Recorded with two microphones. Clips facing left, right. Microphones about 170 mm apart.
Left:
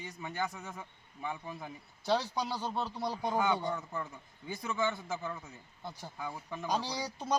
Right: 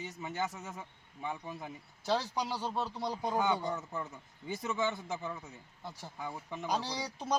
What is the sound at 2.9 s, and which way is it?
Speech, 5° left (ahead or behind).